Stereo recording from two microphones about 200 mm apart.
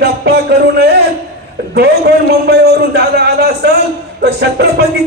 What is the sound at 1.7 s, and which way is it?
A man's voice, 55° right (ahead or behind).